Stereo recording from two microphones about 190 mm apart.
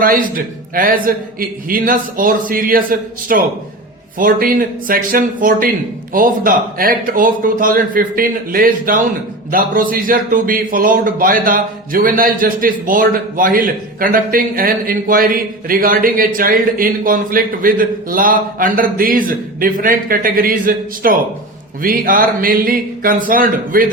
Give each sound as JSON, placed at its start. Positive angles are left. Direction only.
{"t": 0.0, "sound": "a man's voice", "side_deg": -50}